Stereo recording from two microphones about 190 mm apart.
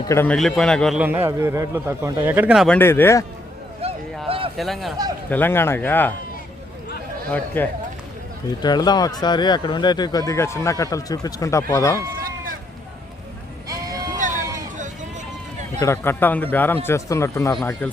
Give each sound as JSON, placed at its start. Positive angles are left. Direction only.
{"t": 0.1, "sound": "speech", "side_deg": 10}
{"t": 0.3, "sound": "a man's voice", "side_deg": 0}
{"t": 1.0, "sound": "a man's voice", "side_deg": -10}
{"t": 2.7, "sound": "speech", "side_deg": 10}
{"t": 3.8, "sound": "a sound", "side_deg": -30}
{"t": 4.5, "sound": "a man's voice", "side_deg": 0}
{"t": 5.3, "sound": "speech", "side_deg": 10}
{"t": 7.3, "sound": "speech", "side_deg": 10}
{"t": 8.6, "sound": "speech", "side_deg": 20}
{"t": 12.1, "sound": "run", "side_deg": -50}
{"t": 14.2, "sound": "a sound", "side_deg": -40}
{"t": 15.8, "sound": "speech", "side_deg": 15}